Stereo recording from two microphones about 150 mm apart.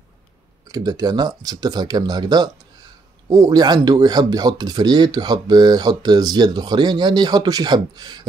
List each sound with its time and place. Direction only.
0.7 s speech: 25° right (ahead or behind)